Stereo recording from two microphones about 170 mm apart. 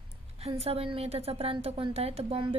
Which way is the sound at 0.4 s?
35° right (ahead or behind).